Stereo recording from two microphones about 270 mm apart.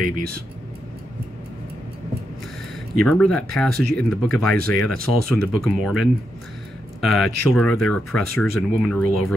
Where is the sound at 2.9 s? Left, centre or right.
Centre.